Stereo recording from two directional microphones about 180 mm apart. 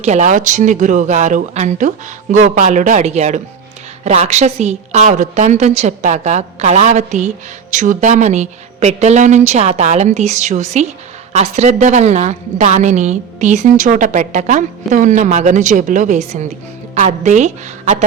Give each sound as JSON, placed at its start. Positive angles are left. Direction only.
{"t": 0.0, "sound": "a woman's voice", "side_deg": -40}